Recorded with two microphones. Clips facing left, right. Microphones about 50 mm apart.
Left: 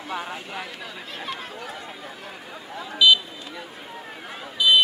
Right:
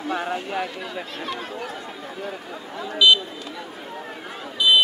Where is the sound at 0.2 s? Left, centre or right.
Centre.